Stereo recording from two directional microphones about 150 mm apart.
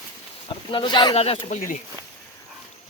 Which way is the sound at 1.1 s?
45° left (ahead or behind).